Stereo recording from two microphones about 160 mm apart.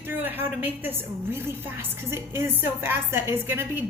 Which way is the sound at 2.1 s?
15° right (ahead or behind).